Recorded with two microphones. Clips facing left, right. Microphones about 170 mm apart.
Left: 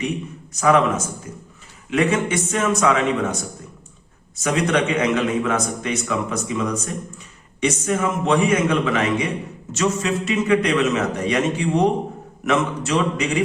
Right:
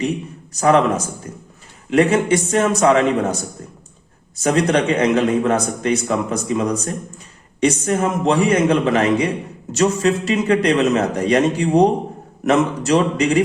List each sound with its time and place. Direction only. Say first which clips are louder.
0.5 s a man's voice: right 2 dB; 35° right (ahead or behind)
4.4 s a man's voice: right 4 dB; 35° right (ahead or behind)